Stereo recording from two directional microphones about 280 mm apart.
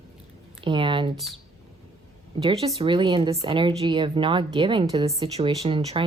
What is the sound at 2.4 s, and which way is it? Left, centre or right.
Speech, right.